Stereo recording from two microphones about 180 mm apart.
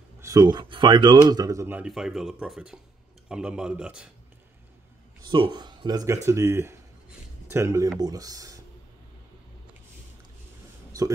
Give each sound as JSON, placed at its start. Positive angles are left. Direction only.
{"t": 0.2, "sound": "speech", "side_deg": -20}
{"t": 5.2, "sound": "speech", "side_deg": -25}
{"t": 10.9, "sound": "a sound", "side_deg": -20}